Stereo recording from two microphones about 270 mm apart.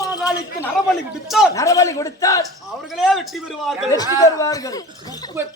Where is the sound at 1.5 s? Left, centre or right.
Centre.